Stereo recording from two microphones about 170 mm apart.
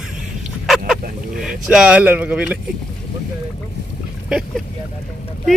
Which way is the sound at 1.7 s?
5° right (ahead or behind).